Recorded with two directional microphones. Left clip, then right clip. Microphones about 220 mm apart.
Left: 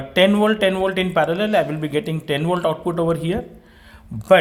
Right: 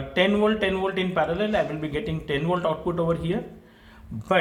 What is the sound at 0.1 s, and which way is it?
Speech, 50° left (ahead or behind).